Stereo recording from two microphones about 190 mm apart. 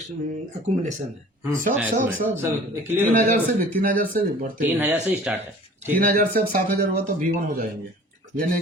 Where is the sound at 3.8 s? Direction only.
45° right (ahead or behind).